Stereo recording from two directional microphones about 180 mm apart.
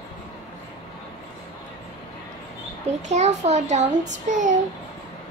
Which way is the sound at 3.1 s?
40° right (ahead or behind).